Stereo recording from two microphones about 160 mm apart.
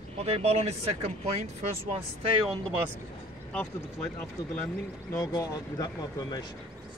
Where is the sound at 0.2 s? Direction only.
40° right (ahead or behind).